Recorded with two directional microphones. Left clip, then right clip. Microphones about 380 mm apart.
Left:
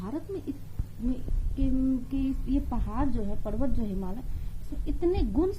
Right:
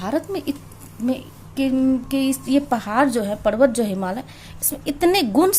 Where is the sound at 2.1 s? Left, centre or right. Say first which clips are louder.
Right 11 dB; right.